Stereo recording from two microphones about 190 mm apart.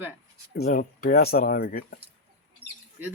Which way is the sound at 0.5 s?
55° left (ahead or behind).